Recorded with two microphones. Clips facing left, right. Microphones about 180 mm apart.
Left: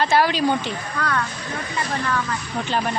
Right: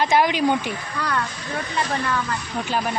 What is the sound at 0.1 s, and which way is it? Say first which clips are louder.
Speech: even; 15° right (ahead or behind).